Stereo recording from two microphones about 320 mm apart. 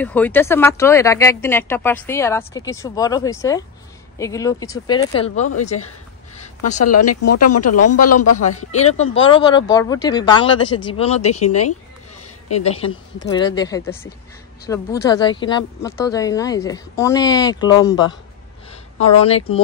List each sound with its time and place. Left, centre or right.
0.0 s speech: centre; by 5.8 s left
6.8 s speech: left
8.8 s speech: centre
11.2 s speech: left
12.5 s speech: centre